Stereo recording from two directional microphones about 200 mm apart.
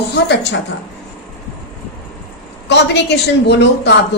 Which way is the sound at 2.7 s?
60° left (ahead or behind).